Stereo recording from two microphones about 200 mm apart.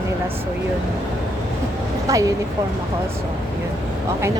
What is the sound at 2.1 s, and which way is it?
Speech, 15° right (ahead or behind).